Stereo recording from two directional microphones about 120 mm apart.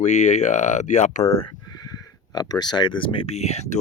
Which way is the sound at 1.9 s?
35° left (ahead or behind).